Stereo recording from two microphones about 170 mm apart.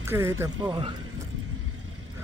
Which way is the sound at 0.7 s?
35° right (ahead or behind).